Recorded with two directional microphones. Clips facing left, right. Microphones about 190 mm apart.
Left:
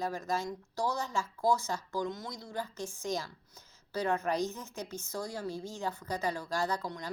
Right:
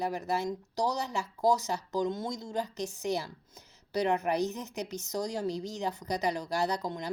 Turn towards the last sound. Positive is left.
turn(degrees=-20)  # may be behind; listen again after turning